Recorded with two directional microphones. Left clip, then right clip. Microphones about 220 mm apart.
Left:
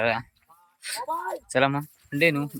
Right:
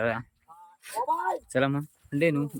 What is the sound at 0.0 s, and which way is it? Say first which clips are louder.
Speech: left 4 dB; 15° right (ahead or behind).